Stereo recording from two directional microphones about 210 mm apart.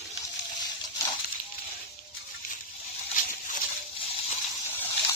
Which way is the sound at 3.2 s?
40° left (ahead or behind).